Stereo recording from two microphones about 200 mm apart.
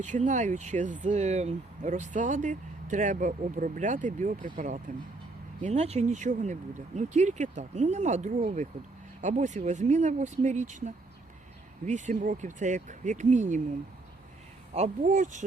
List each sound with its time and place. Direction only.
0.0 s speech: 35° right (ahead or behind)
14.7 s speech: 35° right (ahead or behind)